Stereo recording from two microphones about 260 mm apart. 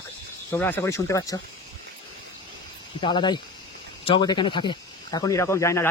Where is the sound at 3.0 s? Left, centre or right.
Centre.